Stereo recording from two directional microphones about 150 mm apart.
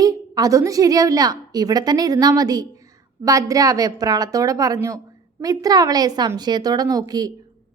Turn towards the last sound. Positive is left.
turn(degrees=-25)  # may be behind; listen again after turning